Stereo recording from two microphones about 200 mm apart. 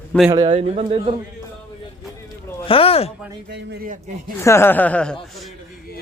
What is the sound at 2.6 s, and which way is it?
Speech, 25° left (ahead or behind).